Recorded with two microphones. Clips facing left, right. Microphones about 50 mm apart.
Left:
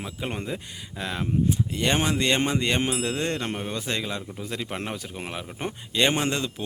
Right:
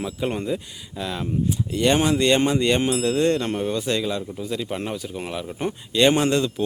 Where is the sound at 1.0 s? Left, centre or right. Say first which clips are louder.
Right 1 dB; left.